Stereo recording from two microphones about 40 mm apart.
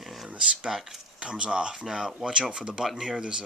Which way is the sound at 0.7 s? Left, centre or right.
Centre.